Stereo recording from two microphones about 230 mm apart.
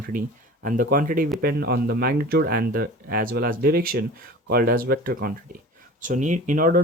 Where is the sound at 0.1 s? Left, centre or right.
Right.